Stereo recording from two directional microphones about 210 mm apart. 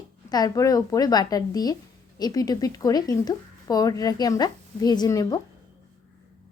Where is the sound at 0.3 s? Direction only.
20° left (ahead or behind).